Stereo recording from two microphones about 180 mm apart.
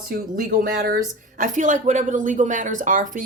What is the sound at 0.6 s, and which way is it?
Speech, 55° right (ahead or behind).